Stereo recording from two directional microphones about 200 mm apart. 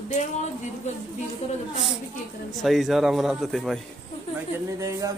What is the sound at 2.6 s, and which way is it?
Speech, centre (ahead or behind).